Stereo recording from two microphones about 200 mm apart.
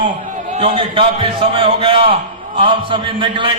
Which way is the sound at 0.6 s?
25° right (ahead or behind).